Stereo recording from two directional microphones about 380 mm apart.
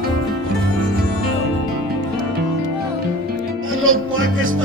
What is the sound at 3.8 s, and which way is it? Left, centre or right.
Music, right.